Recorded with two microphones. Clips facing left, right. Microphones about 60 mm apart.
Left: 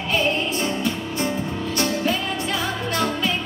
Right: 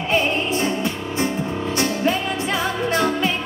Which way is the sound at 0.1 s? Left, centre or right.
Right.